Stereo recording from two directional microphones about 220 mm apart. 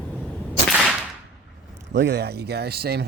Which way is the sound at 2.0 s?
50° right (ahead or behind).